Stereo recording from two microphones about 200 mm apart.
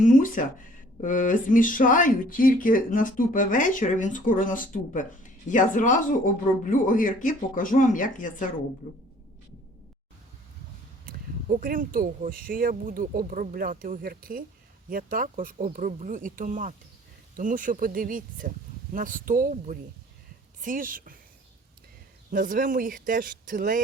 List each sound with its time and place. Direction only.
0.0 s speech: 40° left (ahead or behind)
11.0 s speech: 45° right (ahead or behind)
22.3 s speech: 45° right (ahead or behind)